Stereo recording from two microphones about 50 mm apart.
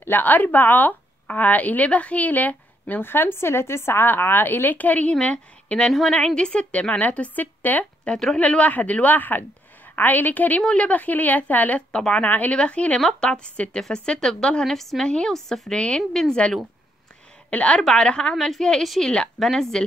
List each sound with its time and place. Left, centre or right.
0.0 s a woman's voice: left
5.9 s speech: centre
6.2 s speech: centre; by 8.1 s left
8.1 s speech: centre
8.4 s a woman's voice: left
11.9 s speech: left
12.3 s a woman's voice: left
12.5 s speech: left
14.6 s speech: centre
15.0 s speech: centre
15.7 s speech: centre
18.3 s speech: centre